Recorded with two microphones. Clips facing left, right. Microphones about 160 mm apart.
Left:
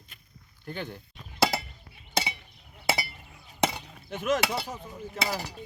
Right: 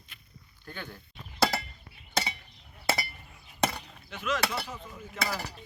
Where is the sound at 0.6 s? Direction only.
20° left (ahead or behind).